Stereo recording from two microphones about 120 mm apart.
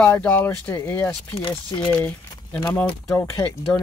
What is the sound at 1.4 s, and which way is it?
Speech, 40° left (ahead or behind).